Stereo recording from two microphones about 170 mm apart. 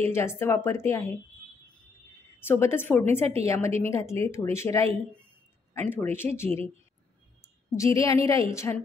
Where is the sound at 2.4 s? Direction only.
15° left (ahead or behind).